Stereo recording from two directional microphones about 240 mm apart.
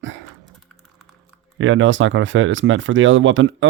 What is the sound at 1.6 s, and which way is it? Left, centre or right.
Speech, right.